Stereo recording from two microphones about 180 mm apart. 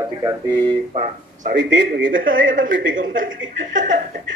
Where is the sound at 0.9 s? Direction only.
40° right (ahead or behind).